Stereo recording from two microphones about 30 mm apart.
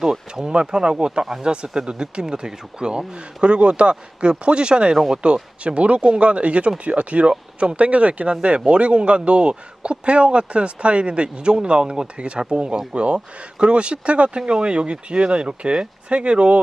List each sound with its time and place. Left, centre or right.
0.0 s a sound: centre
0.4 s speech: right
7.3 s speech: right
7.8 s speech: right